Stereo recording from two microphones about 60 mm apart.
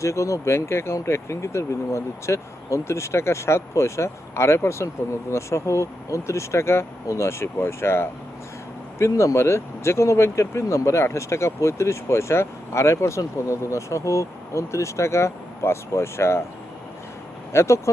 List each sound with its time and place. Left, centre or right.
0.0 s speech: left
9.0 s speech: left
17.5 s speech: left